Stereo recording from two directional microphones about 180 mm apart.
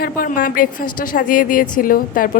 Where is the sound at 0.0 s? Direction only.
50° left (ahead or behind).